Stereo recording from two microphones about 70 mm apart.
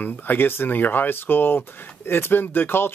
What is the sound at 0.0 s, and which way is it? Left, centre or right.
Speech, left.